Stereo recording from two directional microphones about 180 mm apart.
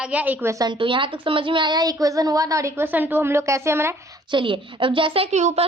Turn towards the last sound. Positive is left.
turn(degrees=-35)  # may be behind; listen again after turning